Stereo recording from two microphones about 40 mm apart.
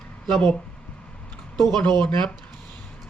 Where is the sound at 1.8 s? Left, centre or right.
Left.